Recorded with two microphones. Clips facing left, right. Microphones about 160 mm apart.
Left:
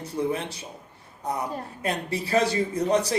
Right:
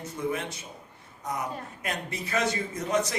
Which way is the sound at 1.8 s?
30° left (ahead or behind).